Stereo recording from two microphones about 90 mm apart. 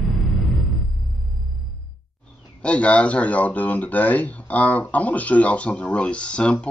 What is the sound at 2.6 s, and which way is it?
Speech, 15° left (ahead or behind).